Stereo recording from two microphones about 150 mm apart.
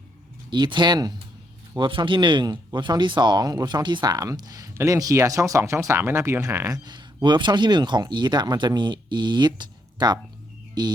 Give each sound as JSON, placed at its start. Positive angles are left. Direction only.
{"t": 0.5, "sound": "speech", "side_deg": -30}